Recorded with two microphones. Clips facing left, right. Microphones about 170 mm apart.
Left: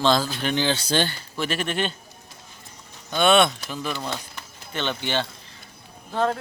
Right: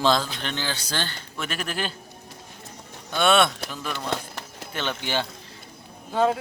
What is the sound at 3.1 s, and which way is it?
Speech, centre (ahead or behind).